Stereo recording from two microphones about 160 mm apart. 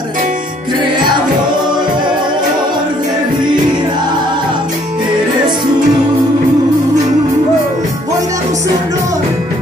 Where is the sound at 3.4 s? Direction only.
30° right (ahead or behind).